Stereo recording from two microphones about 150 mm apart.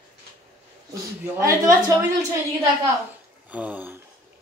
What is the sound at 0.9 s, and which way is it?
Speech, 20° right (ahead or behind).